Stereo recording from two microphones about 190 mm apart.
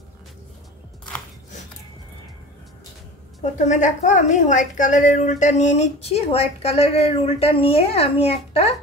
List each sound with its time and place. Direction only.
3.5 s a woman's voice: 40° left (ahead or behind)